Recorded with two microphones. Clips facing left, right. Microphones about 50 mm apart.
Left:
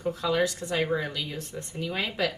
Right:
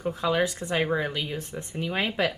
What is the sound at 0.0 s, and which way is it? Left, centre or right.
Speech, right.